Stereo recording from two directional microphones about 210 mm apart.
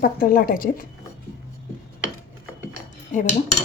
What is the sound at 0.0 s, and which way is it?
Speech, 40° left (ahead or behind).